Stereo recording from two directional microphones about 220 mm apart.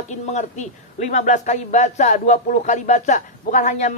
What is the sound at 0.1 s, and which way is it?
A man's voice, 30° left (ahead or behind).